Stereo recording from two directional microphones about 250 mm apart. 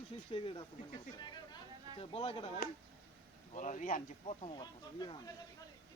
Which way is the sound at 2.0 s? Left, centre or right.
Left.